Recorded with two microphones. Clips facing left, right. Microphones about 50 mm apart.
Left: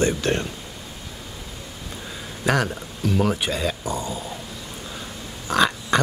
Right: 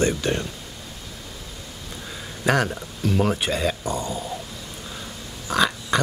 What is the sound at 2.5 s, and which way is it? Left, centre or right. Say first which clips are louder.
Speech: right 1 dB; centre.